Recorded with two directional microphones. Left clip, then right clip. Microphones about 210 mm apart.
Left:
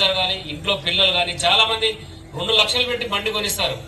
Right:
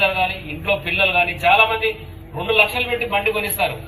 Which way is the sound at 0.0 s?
45° left (ahead or behind).